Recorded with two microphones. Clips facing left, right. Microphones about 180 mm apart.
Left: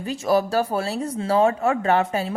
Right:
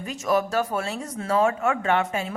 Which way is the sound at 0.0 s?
35° left (ahead or behind).